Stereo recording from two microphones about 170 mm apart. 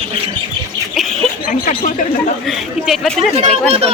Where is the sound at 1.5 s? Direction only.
50° left (ahead or behind).